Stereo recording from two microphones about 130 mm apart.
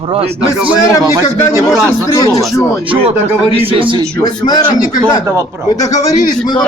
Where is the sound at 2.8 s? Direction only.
40° right (ahead or behind).